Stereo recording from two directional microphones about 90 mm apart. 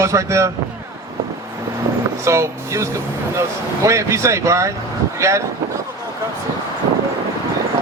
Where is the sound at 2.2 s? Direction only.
30° right (ahead or behind).